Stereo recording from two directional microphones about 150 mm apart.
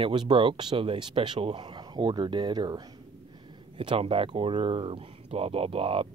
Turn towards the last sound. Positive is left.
turn(degrees=-40)  # may be behind; listen again after turning